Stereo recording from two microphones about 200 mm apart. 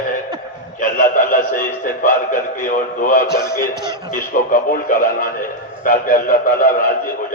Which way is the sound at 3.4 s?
15° left (ahead or behind).